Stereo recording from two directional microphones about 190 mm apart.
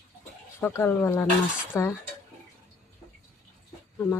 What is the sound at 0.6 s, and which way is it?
Speech, 10° left (ahead or behind).